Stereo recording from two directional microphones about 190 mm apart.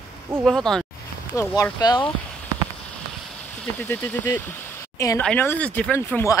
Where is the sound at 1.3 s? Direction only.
15° left (ahead or behind).